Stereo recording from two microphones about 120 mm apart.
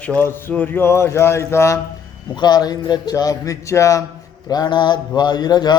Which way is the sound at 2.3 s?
35° left (ahead or behind).